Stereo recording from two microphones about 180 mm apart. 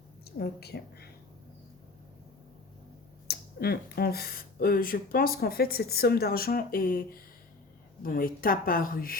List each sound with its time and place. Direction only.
0.3 s speech: 60° left (ahead or behind)
3.2 s speech: 60° left (ahead or behind)